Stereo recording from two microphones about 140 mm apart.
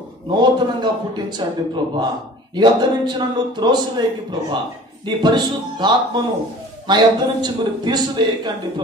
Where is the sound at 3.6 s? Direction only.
30° right (ahead or behind).